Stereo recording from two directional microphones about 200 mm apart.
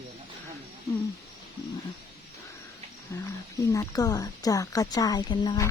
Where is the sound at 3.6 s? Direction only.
15° left (ahead or behind).